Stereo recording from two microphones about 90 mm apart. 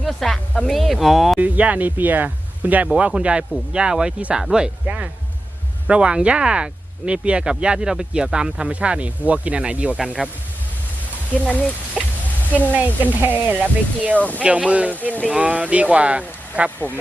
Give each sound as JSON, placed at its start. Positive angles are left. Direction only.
{"t": 0.0, "sound": "speech", "side_deg": 5}
{"t": 1.4, "sound": "speech", "side_deg": -15}
{"t": 11.3, "sound": "speech", "side_deg": 15}
{"t": 12.0, "sound": "speech", "side_deg": -5}
{"t": 12.5, "sound": "a woman's voice", "side_deg": 20}
{"t": 13.1, "sound": "speech", "side_deg": -20}